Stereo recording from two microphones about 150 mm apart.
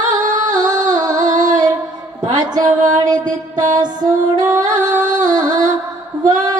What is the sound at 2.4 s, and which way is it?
Music, 25° right (ahead or behind).